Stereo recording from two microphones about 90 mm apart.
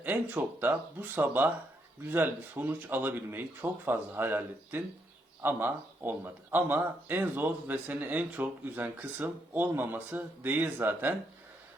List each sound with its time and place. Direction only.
0.0 s speech: 20° right (ahead or behind)